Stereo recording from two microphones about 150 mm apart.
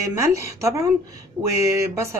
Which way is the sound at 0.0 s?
20° right (ahead or behind).